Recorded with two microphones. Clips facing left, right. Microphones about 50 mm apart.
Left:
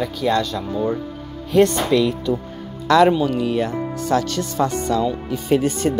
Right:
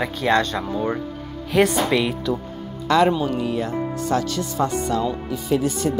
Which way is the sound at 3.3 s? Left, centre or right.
Left.